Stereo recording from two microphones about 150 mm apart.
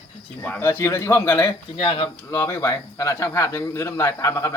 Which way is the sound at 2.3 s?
20° left (ahead or behind).